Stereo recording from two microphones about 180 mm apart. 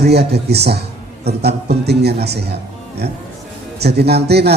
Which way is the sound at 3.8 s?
65° right (ahead or behind).